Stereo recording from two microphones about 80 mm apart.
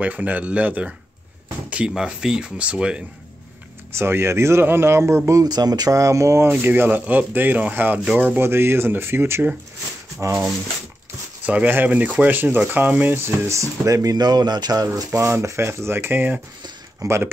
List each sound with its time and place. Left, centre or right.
0.0 s speech: centre
3.9 s speech: right
5.4 s speech: right; by 8.4 s centre
8.4 s speech: right
11.4 s speech: centre
13.5 s speech: right
15.0 s speech: right
17.0 s speech: right